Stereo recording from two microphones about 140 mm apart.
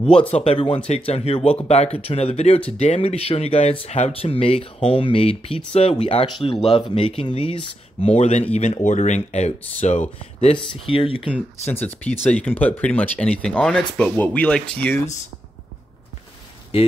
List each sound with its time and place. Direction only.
0.3 s speech: 50° left (ahead or behind)
0.6 s speech: 35° left (ahead or behind)
0.8 s speech: 50° left (ahead or behind)
10.4 s speech: 40° left (ahead or behind)
11.3 s speech: 15° left (ahead or behind)
16.7 s speech: 40° left (ahead or behind)